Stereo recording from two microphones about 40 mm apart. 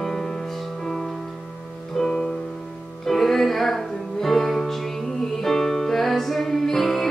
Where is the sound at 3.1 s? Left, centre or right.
Centre.